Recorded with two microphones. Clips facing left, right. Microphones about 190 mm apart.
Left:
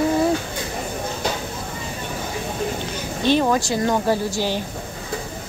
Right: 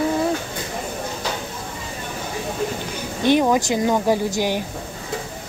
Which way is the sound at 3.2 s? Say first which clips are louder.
Right 2 dB; 15° right (ahead or behind).